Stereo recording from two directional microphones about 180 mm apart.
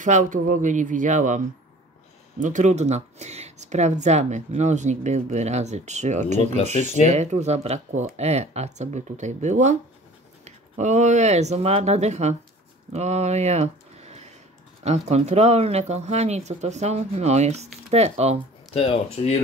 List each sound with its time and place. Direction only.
0.0 s speech: 45° right (ahead or behind)
2.4 s speech: 40° right (ahead or behind)
18.7 s speech: 30° left (ahead or behind)